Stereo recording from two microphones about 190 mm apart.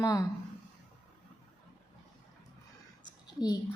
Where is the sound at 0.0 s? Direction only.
20° left (ahead or behind).